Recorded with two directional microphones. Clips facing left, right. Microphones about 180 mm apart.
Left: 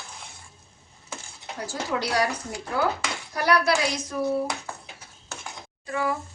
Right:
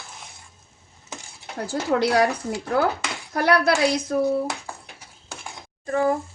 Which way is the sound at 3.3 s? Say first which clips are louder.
Right 3 dB; 55° right (ahead or behind).